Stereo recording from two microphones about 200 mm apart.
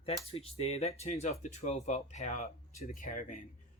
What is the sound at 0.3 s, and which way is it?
Speech, 30° left (ahead or behind).